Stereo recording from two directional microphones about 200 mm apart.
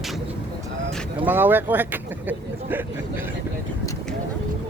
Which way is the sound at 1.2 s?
10° right (ahead or behind).